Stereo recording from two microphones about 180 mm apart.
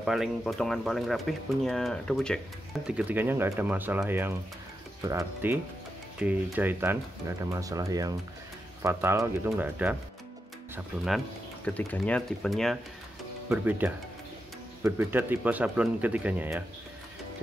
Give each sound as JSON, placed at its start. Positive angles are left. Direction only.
{"t": 0.0, "sound": "speech", "side_deg": -5}
{"t": 2.9, "sound": "speech", "side_deg": -5}
{"t": 11.1, "sound": "speech", "side_deg": 5}
{"t": 13.5, "sound": "speech", "side_deg": -10}